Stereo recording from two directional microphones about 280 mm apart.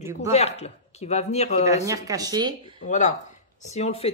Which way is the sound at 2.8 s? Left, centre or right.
Left.